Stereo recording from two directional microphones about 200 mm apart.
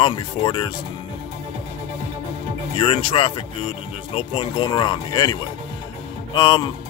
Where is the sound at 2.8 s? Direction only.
30° left (ahead or behind).